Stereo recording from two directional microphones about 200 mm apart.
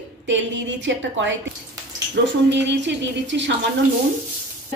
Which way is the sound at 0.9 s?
65° right (ahead or behind).